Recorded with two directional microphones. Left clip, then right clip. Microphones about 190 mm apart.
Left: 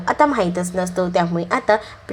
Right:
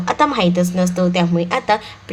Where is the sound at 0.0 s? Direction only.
20° left (ahead or behind).